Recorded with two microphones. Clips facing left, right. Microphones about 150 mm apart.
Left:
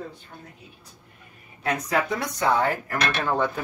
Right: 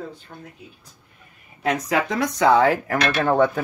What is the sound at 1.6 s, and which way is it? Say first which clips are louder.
Speech: right 3 dB; 90° right.